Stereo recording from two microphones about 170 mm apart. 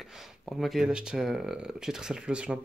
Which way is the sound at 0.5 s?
Centre (ahead or behind).